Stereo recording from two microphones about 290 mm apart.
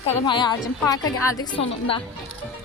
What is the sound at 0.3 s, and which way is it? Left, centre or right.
A woman's voice, centre.